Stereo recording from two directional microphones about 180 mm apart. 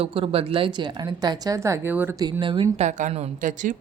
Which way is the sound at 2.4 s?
30° right (ahead or behind).